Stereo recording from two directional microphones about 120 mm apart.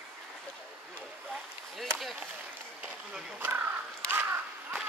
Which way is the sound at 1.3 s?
Centre (ahead or behind).